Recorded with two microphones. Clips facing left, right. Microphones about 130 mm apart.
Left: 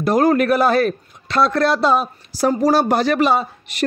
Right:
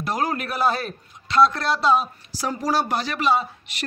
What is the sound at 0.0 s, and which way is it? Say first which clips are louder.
A man's voice: left 10 dB; 55° left (ahead or behind).